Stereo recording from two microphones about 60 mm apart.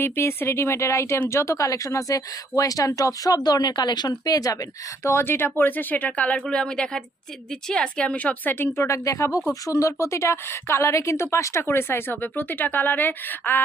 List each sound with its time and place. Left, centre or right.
0.0 s a woman's voice: left
5.0 s speech: left
8.5 s a woman's voice: left
9.0 s a woman's voice: left
11.6 s speech: left